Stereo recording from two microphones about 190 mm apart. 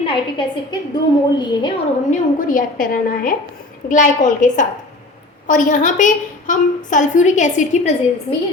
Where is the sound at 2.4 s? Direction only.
45° left (ahead or behind).